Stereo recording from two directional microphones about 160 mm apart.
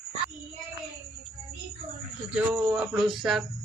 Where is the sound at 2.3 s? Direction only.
5° right (ahead or behind).